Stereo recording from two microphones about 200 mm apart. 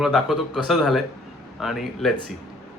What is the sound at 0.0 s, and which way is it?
Speech, centre (ahead or behind).